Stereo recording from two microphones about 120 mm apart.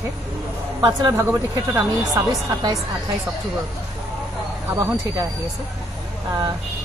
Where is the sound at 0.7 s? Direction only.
40° right (ahead or behind).